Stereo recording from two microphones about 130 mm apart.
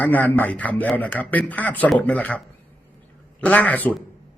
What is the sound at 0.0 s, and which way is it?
A man's voice, 10° left (ahead or behind).